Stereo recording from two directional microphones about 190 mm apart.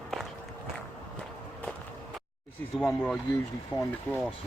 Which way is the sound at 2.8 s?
Centre (ahead or behind).